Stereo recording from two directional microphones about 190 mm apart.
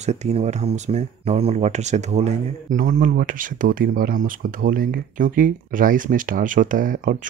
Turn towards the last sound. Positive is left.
turn(degrees=-45)  # may be behind; listen again after turning